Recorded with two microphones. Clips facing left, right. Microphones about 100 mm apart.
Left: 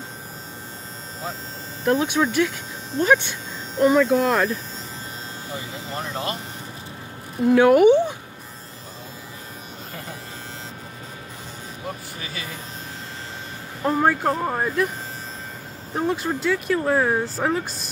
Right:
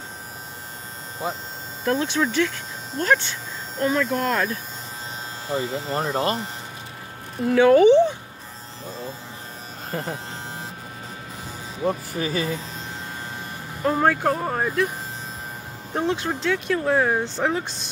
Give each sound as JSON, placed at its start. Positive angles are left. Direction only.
{"t": 1.9, "sound": "speech", "side_deg": 10}
{"t": 5.5, "sound": "speech", "side_deg": -35}
{"t": 7.4, "sound": "speech", "side_deg": 5}
{"t": 9.8, "sound": "speech", "side_deg": -40}
{"t": 11.8, "sound": "speech", "side_deg": -40}
{"t": 13.8, "sound": "speech", "side_deg": 5}
{"t": 15.9, "sound": "speech", "side_deg": 0}